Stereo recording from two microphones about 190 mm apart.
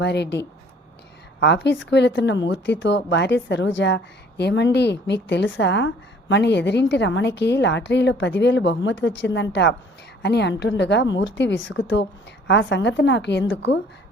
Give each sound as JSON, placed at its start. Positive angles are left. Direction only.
{"t": 0.0, "sound": "a woman's voice", "side_deg": 65}
{"t": 12.5, "sound": "a woman's voice", "side_deg": 70}